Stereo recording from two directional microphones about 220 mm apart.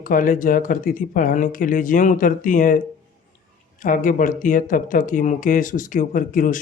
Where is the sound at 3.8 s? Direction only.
35° left (ahead or behind).